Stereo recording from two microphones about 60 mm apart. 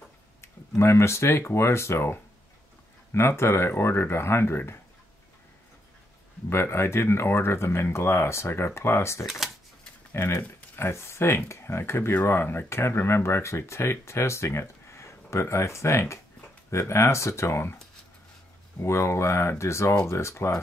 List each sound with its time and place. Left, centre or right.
0.4 s speech: left
6.5 s speech: left
9.2 s speech: centre
10.1 s speech: left
18.8 s speech: left